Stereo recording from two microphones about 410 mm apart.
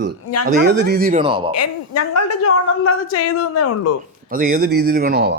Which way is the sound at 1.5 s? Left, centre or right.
Left.